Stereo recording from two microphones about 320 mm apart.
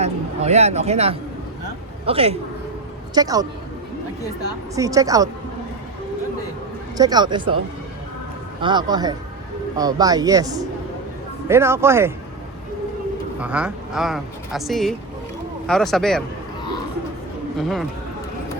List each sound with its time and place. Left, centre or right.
0.0 s speech: centre
4.7 s speech: centre
6.9 s speech: centre
8.6 s speech: centre
13.4 s speech: centre
17.6 s speech: centre